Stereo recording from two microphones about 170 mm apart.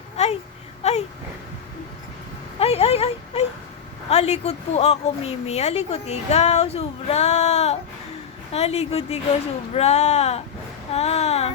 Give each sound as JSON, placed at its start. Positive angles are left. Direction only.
{"t": 0.2, "sound": "speech", "side_deg": 40}
{"t": 2.6, "sound": "a woman's voice", "side_deg": 35}